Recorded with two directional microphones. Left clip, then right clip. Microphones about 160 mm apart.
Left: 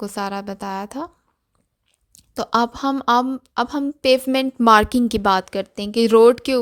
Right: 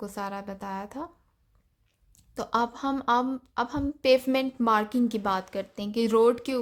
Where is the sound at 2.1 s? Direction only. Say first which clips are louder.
Left 8 dB; 55° left (ahead or behind).